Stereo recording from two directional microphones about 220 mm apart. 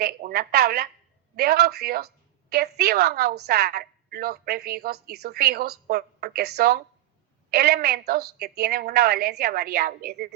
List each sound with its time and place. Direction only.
0.0 s telephone: 45° right (ahead or behind)
1.4 s a woman's voice: 45° right (ahead or behind)